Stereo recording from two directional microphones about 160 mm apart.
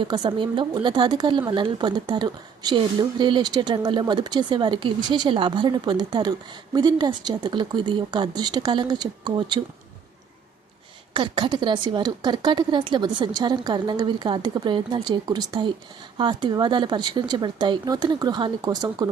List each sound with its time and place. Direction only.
0.0 s a woman's voice: 30° right (ahead or behind)
11.1 s a woman's voice: 30° right (ahead or behind)